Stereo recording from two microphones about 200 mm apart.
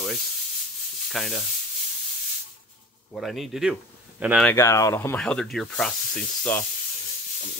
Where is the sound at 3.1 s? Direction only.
Centre (ahead or behind).